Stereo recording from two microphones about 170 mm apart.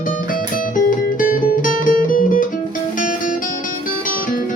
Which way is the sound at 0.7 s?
50° left (ahead or behind).